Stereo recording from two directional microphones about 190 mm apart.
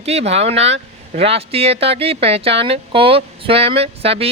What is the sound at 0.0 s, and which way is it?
Speech, 35° right (ahead or behind).